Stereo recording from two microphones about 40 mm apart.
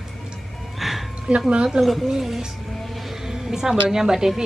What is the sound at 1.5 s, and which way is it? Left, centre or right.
Speech, right.